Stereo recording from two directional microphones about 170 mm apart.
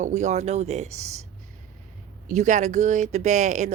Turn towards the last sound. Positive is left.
turn(degrees=-45)  # may be behind; listen again after turning